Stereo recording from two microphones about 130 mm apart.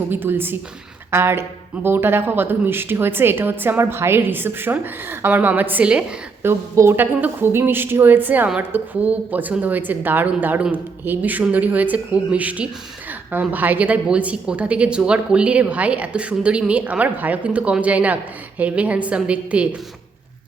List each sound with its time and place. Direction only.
0.1 s speech: 15° right (ahead or behind)